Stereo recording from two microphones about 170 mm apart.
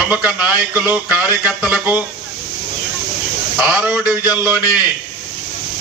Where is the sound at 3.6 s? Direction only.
5° right (ahead or behind).